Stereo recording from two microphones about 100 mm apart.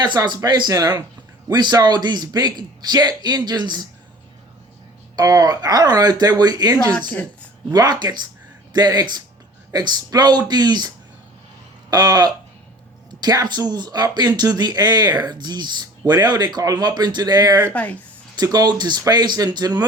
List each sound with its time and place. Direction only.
0.0 s speech: 45° right (ahead or behind)
5.1 s speech: 40° right (ahead or behind)